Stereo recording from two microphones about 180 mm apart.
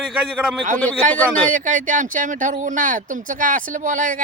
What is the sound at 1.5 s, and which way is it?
Speech, 45° right (ahead or behind).